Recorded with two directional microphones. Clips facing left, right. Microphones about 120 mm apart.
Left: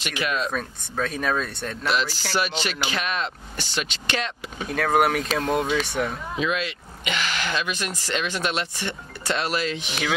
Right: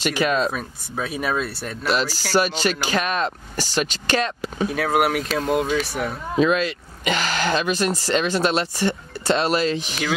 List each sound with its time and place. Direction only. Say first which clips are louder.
0.0 s speech: right 6 dB; 35° right (ahead or behind)
0.5 s speech: right 1 dB; 10° right (ahead or behind)
2.3 s speech: right 6 dB; 40° right (ahead or behind)
4.6 s speech: even; 5° right (ahead or behind)
6.3 s speech: right 10 dB; 40° right (ahead or behind)